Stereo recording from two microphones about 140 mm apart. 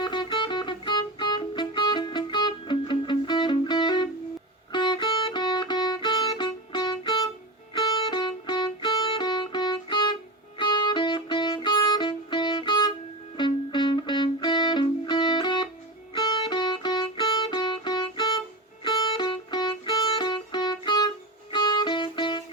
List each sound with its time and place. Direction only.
0.0 s music: 35° left (ahead or behind)